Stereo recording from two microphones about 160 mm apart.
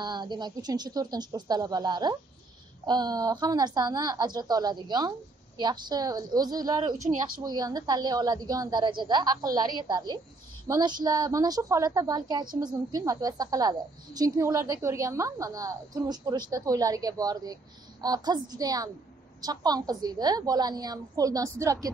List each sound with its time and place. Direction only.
0.0 s a woman's voice: 25° right (ahead or behind)